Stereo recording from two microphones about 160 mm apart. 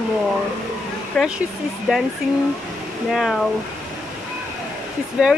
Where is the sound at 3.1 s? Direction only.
Centre (ahead or behind).